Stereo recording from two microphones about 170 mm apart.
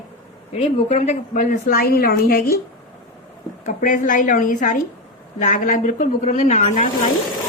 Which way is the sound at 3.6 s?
50° left (ahead or behind).